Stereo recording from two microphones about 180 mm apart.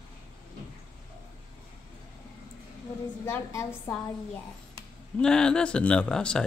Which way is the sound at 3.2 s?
10° left (ahead or behind).